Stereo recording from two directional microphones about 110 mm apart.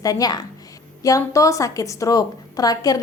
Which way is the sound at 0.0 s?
35° left (ahead or behind).